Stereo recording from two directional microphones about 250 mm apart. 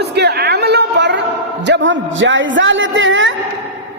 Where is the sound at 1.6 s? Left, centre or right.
Right.